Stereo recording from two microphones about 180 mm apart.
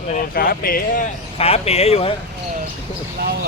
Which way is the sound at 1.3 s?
35° left (ahead or behind).